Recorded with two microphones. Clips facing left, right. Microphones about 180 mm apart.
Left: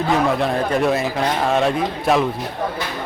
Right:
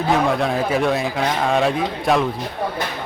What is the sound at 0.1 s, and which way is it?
A man's voice, centre (ahead or behind).